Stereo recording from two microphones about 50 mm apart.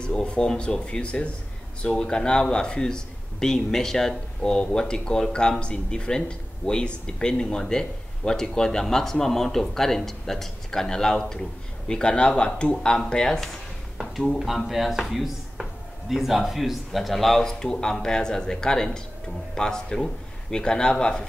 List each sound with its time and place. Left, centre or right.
0.0 s speech: centre
13.9 s a sound: centre
14.7 s speech: centre